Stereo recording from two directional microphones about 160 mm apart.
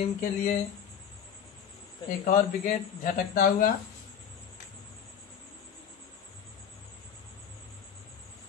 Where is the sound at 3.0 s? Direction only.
65° left (ahead or behind).